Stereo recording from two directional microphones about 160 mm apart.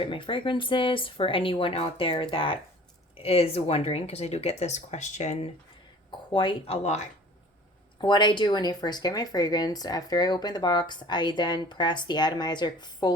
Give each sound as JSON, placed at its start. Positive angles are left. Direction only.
{"t": 0.0, "sound": "speech", "side_deg": 30}
{"t": 6.3, "sound": "speech", "side_deg": 30}
{"t": 8.0, "sound": "speech", "side_deg": 30}